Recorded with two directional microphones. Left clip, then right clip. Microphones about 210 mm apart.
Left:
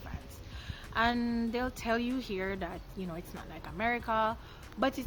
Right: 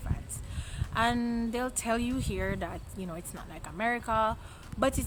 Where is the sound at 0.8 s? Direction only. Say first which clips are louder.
Right 1 dB; 15° right (ahead or behind).